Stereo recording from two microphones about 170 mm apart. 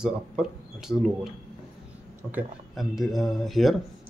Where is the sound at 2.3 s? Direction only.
Centre (ahead or behind).